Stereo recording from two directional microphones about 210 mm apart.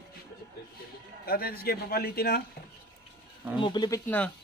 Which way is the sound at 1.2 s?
45° left (ahead or behind).